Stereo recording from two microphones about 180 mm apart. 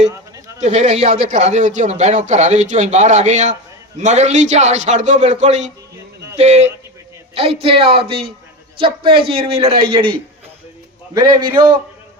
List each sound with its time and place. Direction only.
0.6 s a man's voice: 40° right (ahead or behind); by 11.4 s 25° right (ahead or behind)